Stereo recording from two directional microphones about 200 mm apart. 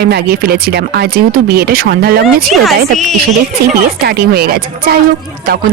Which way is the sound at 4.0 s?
50° right (ahead or behind).